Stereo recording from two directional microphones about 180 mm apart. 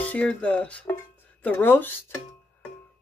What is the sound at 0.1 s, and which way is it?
Speech, 5° left (ahead or behind).